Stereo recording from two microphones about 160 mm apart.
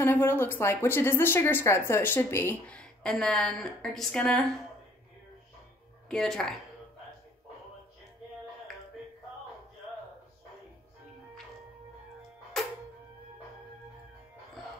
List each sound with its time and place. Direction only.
0.0 s speech: 15° left (ahead or behind)
6.0 s speech: 5° left (ahead or behind)